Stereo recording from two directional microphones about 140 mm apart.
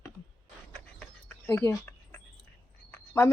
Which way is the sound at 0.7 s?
10° left (ahead or behind).